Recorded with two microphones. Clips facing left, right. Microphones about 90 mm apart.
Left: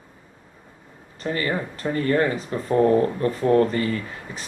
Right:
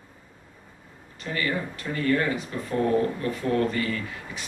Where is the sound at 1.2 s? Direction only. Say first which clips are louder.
Left 3 dB; 35° left (ahead or behind).